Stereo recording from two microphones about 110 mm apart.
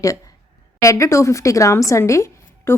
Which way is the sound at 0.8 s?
30° left (ahead or behind).